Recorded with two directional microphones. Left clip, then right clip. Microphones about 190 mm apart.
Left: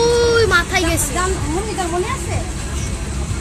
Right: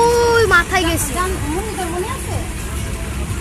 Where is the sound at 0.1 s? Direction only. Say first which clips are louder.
Right 1 dB; 45° right (ahead or behind).